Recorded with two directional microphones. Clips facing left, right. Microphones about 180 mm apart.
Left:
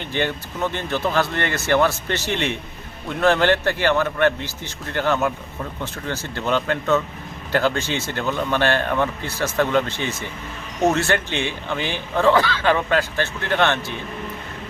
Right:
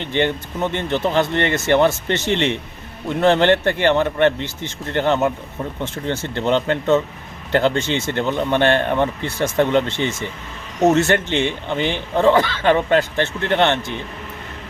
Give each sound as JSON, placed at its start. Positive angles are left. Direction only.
{"t": 0.0, "sound": "speech", "side_deg": -20}